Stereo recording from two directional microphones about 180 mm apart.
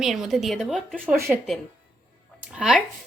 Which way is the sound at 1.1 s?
15° right (ahead or behind).